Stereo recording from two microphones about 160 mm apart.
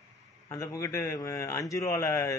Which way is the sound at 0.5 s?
20° left (ahead or behind).